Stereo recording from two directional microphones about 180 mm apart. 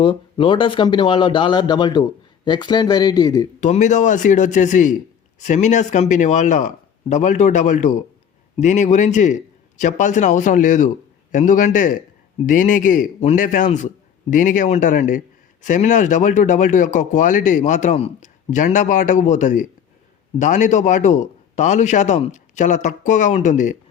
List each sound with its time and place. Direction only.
0.0 s speech: 30° left (ahead or behind)
3.6 s speech: 40° left (ahead or behind)